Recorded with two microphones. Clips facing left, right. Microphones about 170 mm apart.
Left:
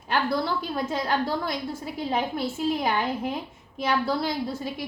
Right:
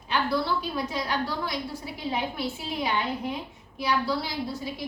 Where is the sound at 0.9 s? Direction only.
45° left (ahead or behind).